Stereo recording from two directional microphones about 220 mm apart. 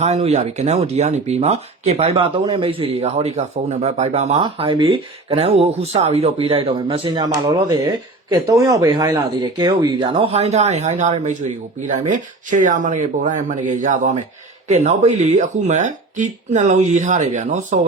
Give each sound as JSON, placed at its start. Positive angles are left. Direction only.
{"t": 0.0, "sound": "speech", "side_deg": -30}